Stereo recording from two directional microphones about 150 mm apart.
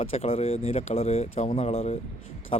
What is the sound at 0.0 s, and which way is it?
Speech, 40° left (ahead or behind).